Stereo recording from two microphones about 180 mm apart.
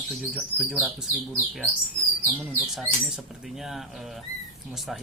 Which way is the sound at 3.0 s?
Centre (ahead or behind).